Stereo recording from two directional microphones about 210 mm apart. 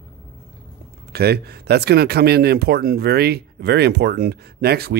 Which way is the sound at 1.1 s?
50° right (ahead or behind).